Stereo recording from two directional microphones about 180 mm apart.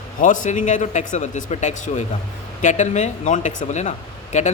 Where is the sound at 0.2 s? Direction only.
45° left (ahead or behind).